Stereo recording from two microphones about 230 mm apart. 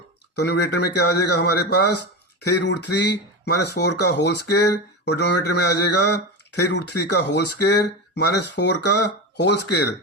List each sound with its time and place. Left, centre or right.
0.3 s speech: left